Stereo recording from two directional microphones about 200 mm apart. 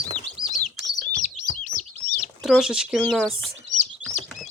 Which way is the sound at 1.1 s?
40° left (ahead or behind).